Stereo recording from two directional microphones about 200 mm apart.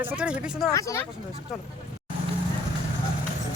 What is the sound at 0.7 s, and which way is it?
Speech, 15° left (ahead or behind).